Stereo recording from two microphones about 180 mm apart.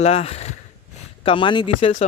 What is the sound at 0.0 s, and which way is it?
Speech, 35° left (ahead or behind).